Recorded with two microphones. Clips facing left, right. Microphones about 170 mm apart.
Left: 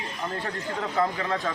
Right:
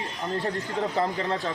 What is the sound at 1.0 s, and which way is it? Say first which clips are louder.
Speech: left 2 dB; 30° right (ahead or behind).